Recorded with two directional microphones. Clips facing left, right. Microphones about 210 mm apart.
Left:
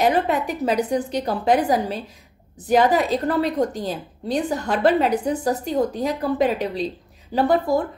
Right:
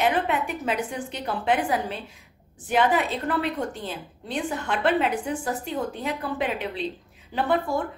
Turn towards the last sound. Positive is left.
turn(degrees=40)  # may be behind; listen again after turning